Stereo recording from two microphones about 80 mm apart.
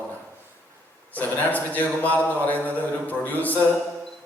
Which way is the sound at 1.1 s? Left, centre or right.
Left.